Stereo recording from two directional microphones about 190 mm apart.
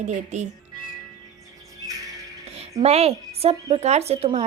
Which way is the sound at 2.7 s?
35° right (ahead or behind).